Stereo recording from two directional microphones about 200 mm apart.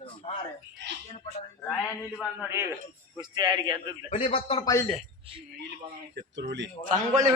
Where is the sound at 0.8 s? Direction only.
60° right (ahead or behind).